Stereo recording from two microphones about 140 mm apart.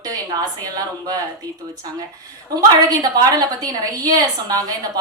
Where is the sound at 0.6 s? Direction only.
25° right (ahead or behind).